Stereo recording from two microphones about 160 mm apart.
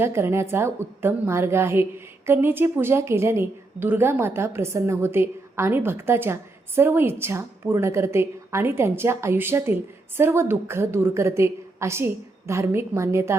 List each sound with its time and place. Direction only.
0.0 s a woman's voice: 15° right (ahead or behind)